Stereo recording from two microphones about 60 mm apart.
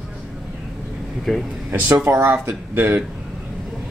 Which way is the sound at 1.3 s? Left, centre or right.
Centre.